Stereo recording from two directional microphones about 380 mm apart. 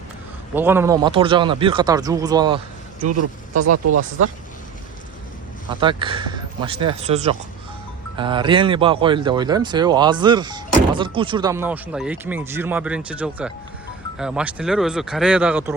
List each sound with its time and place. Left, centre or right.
0.5 s speech: centre
3.0 s speech: right
5.8 s speech: centre